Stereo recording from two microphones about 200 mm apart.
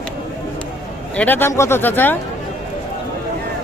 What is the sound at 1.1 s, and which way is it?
Speech, 10° left (ahead or behind).